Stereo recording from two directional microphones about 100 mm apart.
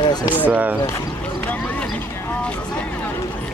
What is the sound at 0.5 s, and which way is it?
Speech, 15° right (ahead or behind).